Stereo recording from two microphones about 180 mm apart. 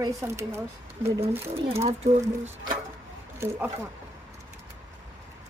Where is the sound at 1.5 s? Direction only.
35° right (ahead or behind).